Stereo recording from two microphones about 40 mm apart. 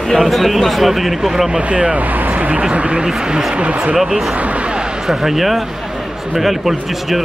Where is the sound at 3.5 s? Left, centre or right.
Right.